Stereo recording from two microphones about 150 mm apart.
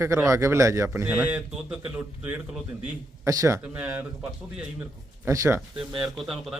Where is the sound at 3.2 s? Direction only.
20° right (ahead or behind).